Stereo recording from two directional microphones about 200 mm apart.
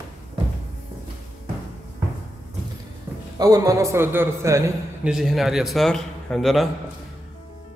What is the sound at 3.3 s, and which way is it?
A man's voice, 15° right (ahead or behind).